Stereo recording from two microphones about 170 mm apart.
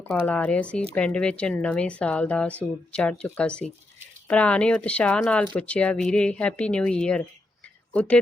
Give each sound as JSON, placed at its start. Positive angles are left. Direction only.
{"t": 0.0, "sound": "speech", "side_deg": 10}